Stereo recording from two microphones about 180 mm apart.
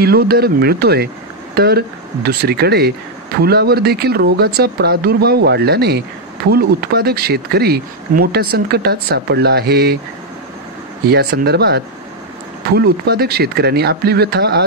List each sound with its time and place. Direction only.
0.0 s speech: 60° right (ahead or behind)
11.1 s speech: 60° right (ahead or behind)